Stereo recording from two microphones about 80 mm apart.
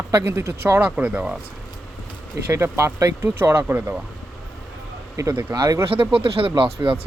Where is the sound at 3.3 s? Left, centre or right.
Right.